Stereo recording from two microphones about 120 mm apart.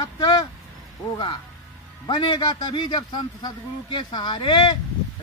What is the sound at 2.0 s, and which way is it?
A man's voice, 40° left (ahead or behind).